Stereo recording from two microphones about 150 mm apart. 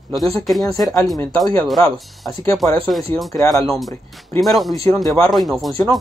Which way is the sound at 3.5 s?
Centre (ahead or behind).